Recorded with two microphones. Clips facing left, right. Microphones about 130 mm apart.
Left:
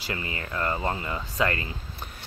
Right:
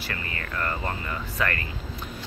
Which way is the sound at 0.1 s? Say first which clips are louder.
Left 3 dB; 20° left (ahead or behind).